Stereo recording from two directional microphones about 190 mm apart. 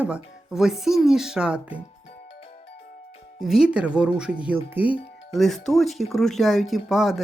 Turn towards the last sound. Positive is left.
turn(degrees=0)  # may be behind; listen again after turning